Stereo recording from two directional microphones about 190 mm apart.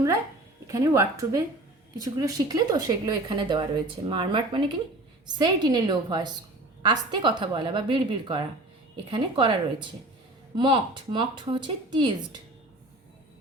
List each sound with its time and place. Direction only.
0.7 s a woman's voice: 15° right (ahead or behind)